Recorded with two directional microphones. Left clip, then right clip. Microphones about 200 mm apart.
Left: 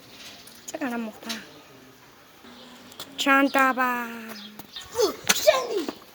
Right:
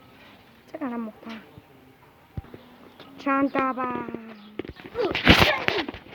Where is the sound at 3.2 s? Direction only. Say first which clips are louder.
Left 4 dB; 25° left (ahead or behind).